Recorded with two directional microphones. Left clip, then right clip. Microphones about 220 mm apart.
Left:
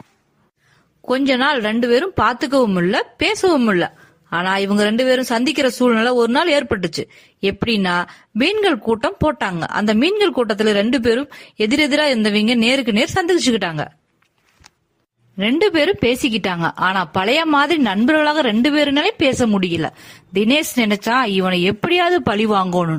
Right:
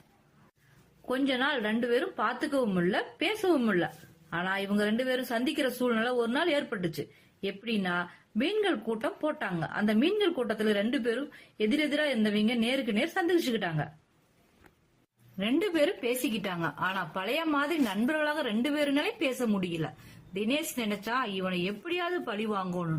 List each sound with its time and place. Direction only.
1.0 s a woman's voice: 45° left (ahead or behind)
15.4 s a woman's voice: 45° left (ahead or behind)